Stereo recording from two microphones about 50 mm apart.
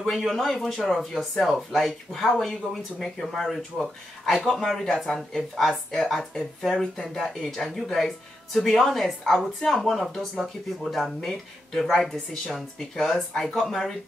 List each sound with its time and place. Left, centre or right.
0.0 s speech: centre
4.4 s speech: centre